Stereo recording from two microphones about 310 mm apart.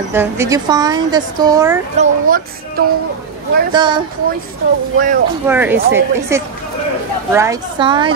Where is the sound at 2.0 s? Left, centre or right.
Right.